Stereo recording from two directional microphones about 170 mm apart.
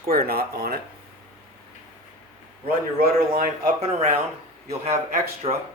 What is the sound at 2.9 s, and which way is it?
Speech, 60° right (ahead or behind).